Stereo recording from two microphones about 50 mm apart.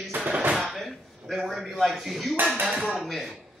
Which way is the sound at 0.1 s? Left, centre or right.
Right.